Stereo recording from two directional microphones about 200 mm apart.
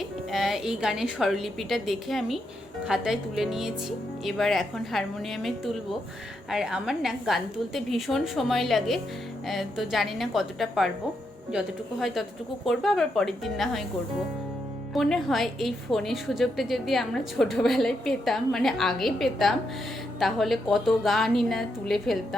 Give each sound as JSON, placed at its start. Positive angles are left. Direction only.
{"t": 0.0, "sound": "a woman's voice", "side_deg": 0}
{"t": 14.9, "sound": "a woman's voice", "side_deg": 0}